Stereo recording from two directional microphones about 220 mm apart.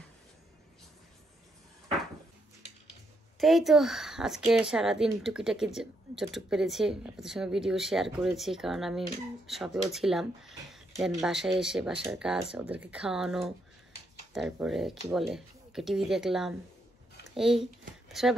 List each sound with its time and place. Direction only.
3.3 s speech: centre (ahead or behind)